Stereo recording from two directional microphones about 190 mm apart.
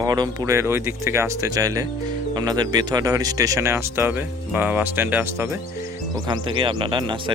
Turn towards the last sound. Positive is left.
turn(degrees=-25)  # may be behind; listen again after turning